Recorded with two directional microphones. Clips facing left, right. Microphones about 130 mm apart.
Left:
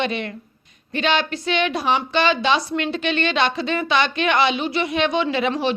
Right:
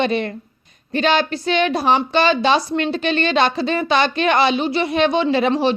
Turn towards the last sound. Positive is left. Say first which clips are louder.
# right 4 dB
turn(degrees=-35)  # may be behind; listen again after turning